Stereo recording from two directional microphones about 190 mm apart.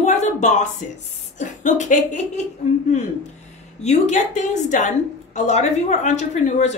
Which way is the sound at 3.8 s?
35° left (ahead or behind).